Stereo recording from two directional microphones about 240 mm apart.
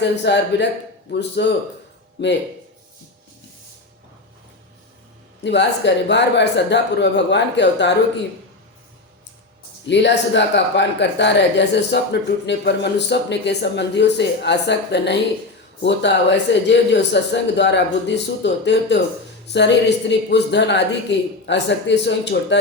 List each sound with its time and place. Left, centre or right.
0.0 s speech: left
5.4 s speech: left
9.8 s speech: left